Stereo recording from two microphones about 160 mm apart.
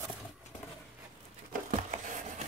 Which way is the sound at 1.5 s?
55° right (ahead or behind).